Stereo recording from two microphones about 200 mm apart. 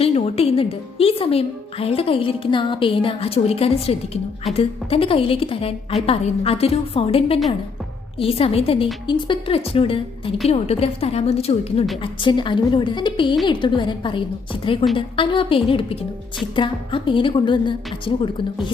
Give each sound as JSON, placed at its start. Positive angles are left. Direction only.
{"t": 0.0, "sound": "a woman's voice", "side_deg": 30}